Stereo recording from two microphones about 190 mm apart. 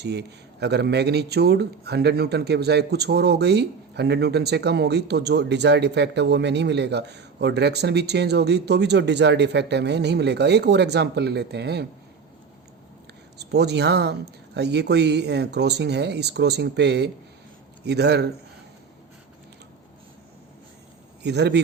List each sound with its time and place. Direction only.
0.0 s speech: 60° right (ahead or behind)
13.4 s speech: 60° right (ahead or behind)
21.2 s speech: 65° right (ahead or behind)